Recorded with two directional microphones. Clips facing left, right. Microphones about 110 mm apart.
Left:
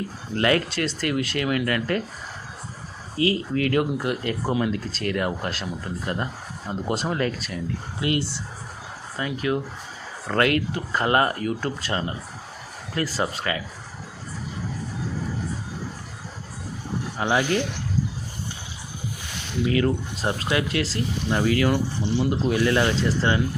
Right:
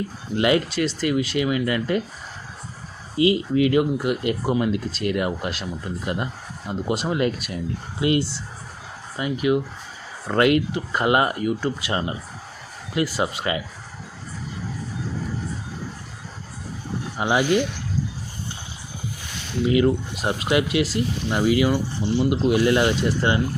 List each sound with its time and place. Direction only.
0.3 s speech: 15° right (ahead or behind)
3.2 s speech: 15° right (ahead or behind)
17.2 s speech: 15° right (ahead or behind)
19.6 s speech: 15° right (ahead or behind)